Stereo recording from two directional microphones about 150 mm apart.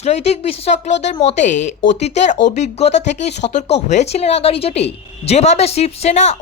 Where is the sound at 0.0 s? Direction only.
45° left (ahead or behind).